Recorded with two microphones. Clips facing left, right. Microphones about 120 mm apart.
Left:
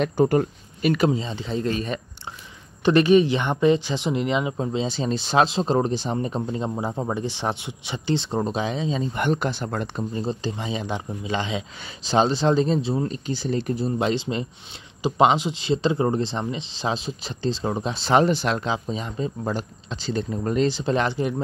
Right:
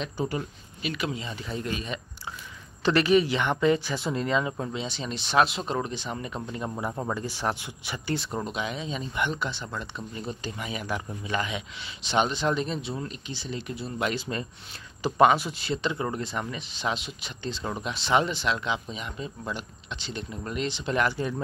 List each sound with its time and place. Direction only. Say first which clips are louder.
0.0 s speech: left 11 dB; 55° left (ahead or behind); by 1.7 s 25° left (ahead or behind)
1.7 s speech: left 6 dB; 40° left (ahead or behind)
2.8 s speech: left 5 dB; 20° left (ahead or behind)
4.7 s speech: left 8 dB; 35° left (ahead or behind)
10.1 s speech: left 6 dB; 30° left (ahead or behind)
13.3 s speech: left 10 dB; 45° left (ahead or behind); by 21.3 s 25° left (ahead or behind)